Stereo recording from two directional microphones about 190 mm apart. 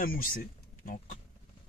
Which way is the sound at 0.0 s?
45° left (ahead or behind).